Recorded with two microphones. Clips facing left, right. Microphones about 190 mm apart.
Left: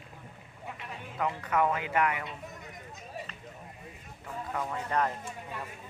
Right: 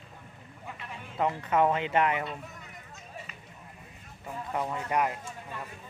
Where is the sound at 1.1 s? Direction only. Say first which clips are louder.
Right 3 dB; 25° right (ahead or behind).